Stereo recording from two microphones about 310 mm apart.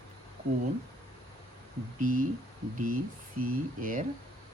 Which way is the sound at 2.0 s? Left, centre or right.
Right.